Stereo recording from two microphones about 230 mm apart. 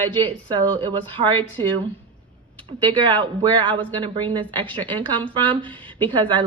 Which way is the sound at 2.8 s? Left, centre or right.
Right.